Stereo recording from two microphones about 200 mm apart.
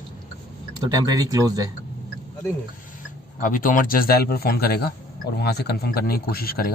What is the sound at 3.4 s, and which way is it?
Speech, 45° left (ahead or behind).